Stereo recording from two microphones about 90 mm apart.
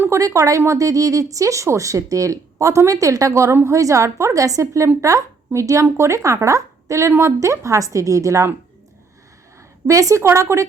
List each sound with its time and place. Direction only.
0.0 s speech: 35° right (ahead or behind)
9.8 s speech: 35° right (ahead or behind)